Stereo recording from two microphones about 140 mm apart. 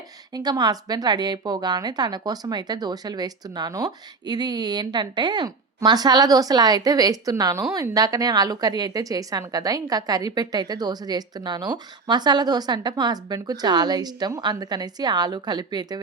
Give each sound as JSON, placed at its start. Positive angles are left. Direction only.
{"t": 0.3, "sound": "a woman's voice", "side_deg": -30}